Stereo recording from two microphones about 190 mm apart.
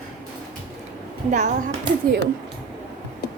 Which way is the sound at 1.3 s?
40° right (ahead or behind).